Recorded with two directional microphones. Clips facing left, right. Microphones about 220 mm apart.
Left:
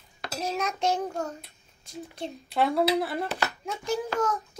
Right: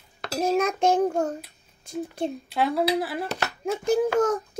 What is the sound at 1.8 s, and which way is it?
Speech, 50° right (ahead or behind).